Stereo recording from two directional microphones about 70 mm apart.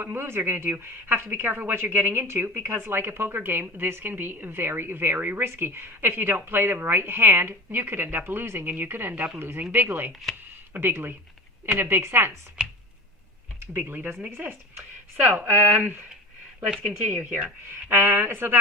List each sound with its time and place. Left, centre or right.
0.0 s a woman's voice: right
10.3 s speech: centre
10.8 s a woman's voice: right
12.6 s a sound: centre
13.7 s speech: right
17.8 s a woman's voice: right